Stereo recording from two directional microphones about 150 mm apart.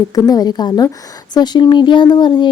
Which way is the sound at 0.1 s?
25° left (ahead or behind).